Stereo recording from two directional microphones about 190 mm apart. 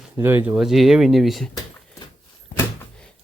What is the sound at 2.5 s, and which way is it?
Door, 45° left (ahead or behind).